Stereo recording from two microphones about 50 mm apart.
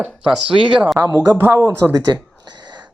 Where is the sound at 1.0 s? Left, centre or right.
Right.